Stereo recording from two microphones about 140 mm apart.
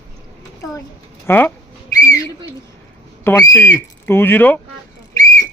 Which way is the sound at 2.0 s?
25° left (ahead or behind).